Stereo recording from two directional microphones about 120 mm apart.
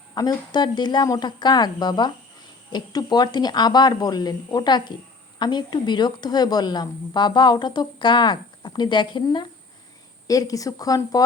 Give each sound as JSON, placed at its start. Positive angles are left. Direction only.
{"t": 0.1, "sound": "a woman's voice", "side_deg": 35}
{"t": 10.2, "sound": "a woman's voice", "side_deg": 30}